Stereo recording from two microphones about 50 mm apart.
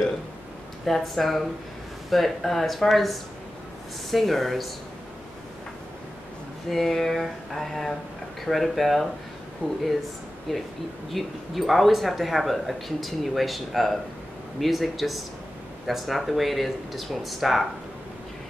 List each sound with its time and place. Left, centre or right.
0.8 s speech: centre
6.7 s speech: centre
9.6 s speech: left
10.5 s speech: centre